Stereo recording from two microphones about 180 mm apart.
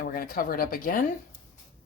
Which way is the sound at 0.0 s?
50° left (ahead or behind).